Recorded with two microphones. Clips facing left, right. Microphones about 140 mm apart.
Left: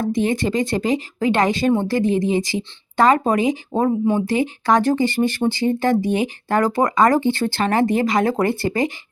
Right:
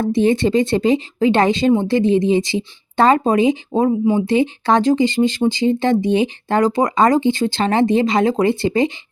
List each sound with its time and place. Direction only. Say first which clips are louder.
0.0 s speech: right 4 dB; 30° right (ahead or behind)